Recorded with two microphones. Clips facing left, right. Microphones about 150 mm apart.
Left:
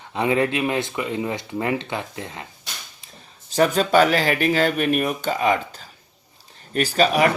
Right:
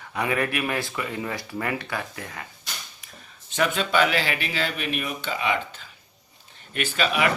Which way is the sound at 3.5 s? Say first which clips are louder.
Left 6 dB; 40° left (ahead or behind).